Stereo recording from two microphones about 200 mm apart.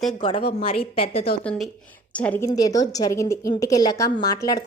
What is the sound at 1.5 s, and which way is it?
A woman's voice, centre (ahead or behind).